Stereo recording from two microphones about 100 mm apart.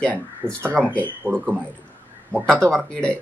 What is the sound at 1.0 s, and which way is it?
Speech, 15° right (ahead or behind).